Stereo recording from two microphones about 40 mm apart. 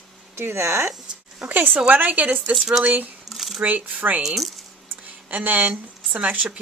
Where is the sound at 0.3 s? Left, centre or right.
Right.